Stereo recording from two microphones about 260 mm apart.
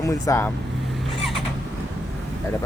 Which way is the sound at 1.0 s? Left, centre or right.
Centre.